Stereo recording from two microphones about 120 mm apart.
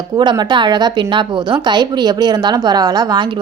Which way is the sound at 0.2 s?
40° right (ahead or behind).